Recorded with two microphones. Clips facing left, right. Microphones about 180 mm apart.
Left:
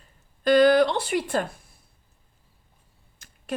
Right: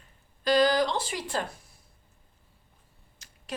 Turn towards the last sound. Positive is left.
turn(degrees=55)  # may be behind; listen again after turning